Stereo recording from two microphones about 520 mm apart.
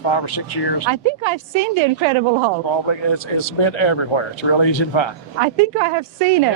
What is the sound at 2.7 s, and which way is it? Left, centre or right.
Speech, left.